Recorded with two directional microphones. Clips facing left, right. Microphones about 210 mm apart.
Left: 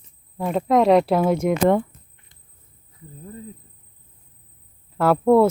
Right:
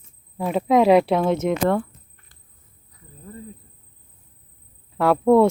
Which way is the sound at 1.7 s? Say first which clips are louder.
Left 3 dB; 20° left (ahead or behind).